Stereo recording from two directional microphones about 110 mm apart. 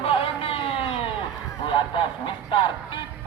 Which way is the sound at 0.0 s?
60° left (ahead or behind).